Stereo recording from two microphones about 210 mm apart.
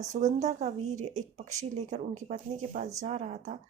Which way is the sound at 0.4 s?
35° right (ahead or behind).